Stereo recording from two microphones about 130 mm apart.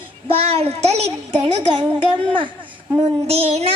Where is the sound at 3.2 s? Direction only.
50° right (ahead or behind).